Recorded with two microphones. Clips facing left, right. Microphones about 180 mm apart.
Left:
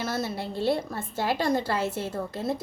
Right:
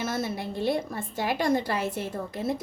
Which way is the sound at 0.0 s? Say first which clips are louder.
Even; 20° right (ahead or behind).